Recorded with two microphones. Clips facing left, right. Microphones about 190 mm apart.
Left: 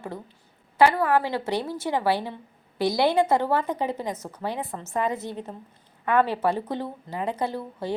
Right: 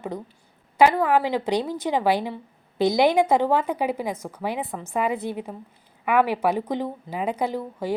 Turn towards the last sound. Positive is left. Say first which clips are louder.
# right 3 dB
turn(degrees=-10)  # may be behind; listen again after turning